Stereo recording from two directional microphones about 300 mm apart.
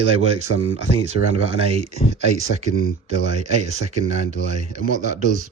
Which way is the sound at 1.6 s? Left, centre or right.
Right.